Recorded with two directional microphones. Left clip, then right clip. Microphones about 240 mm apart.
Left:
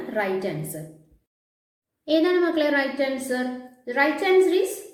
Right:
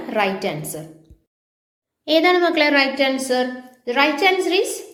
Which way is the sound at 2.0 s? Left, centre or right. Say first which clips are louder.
Right 5 dB; centre.